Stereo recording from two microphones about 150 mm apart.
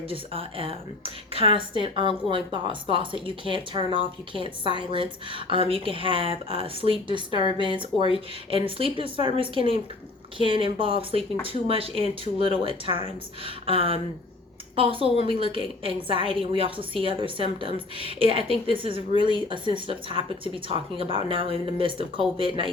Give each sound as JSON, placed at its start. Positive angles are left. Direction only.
{"t": 0.1, "sound": "speech", "side_deg": -40}